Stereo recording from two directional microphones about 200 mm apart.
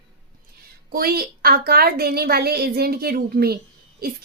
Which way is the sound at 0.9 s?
50° right (ahead or behind).